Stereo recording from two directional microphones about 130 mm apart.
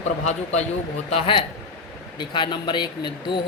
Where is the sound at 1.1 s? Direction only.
45° left (ahead or behind).